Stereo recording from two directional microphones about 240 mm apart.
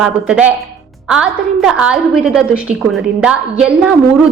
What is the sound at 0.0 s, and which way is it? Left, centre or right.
A woman's voice, centre.